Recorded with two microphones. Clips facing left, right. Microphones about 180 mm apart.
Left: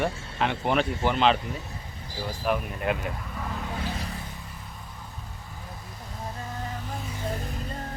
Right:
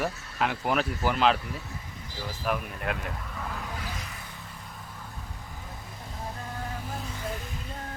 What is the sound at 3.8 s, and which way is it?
Vehicle, 30° left (ahead or behind).